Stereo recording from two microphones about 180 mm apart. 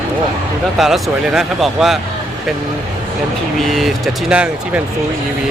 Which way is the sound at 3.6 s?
Centre (ahead or behind).